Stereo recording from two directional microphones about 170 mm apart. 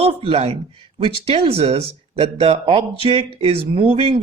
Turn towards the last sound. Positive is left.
turn(degrees=-30)  # may be behind; listen again after turning